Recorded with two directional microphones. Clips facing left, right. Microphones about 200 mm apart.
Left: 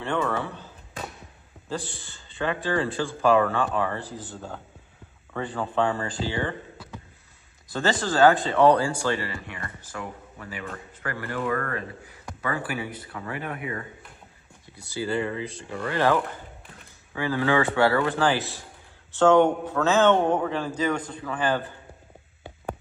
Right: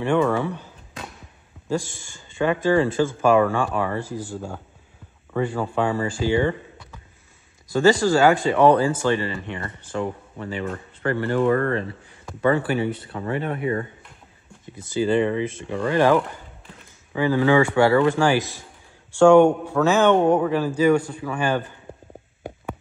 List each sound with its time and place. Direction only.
0.0 s a man's voice: 15° right (ahead or behind)
1.9 s a man's voice: 15° right (ahead or behind)
5.3 s a man's voice: 10° right (ahead or behind)
7.7 s a man's voice: 15° right (ahead or behind); by 13.8 s 35° right (ahead or behind)
14.7 s a man's voice: 20° right (ahead or behind)
17.3 s a man's voice: 15° right (ahead or behind)